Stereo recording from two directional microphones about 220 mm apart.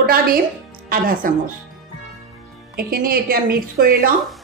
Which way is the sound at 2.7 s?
45° right (ahead or behind).